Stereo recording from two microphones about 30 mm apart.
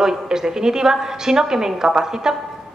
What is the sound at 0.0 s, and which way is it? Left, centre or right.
A woman's voice, centre.